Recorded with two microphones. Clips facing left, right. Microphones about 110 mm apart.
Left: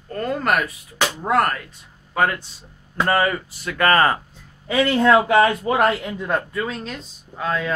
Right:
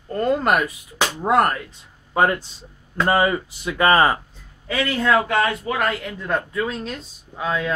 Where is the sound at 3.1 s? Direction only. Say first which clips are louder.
Right 1 dB; 15° right (ahead or behind).